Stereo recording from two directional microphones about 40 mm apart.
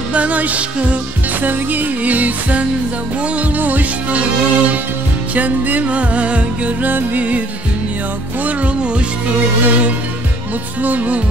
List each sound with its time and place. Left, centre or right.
0.1 s music: right
1.4 s music: right
4.1 s music: right
6.8 s music: right
9.7 s music: right